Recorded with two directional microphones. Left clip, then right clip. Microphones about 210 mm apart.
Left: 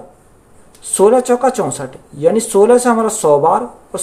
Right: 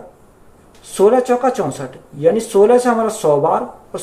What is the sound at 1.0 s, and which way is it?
A man's voice, 40° left (ahead or behind).